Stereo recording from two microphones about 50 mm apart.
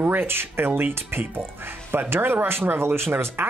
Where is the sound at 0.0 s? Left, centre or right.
Right.